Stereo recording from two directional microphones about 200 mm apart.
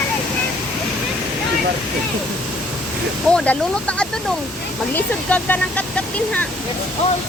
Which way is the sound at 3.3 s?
5° left (ahead or behind).